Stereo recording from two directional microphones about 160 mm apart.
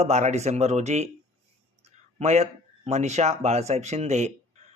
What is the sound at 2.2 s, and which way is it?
Speech, 45° right (ahead or behind).